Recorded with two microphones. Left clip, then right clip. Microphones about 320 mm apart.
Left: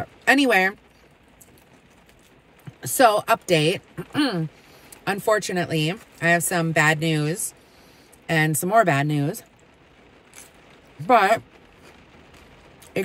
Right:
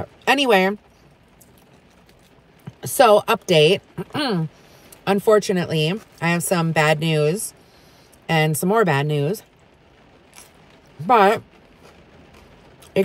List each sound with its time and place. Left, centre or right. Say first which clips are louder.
0.2 s speech: right 1 dB; centre
3.0 s speech: right 3 dB; centre
11.1 s speech: right 2 dB; centre